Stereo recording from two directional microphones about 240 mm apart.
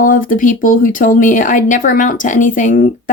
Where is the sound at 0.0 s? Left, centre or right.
Left.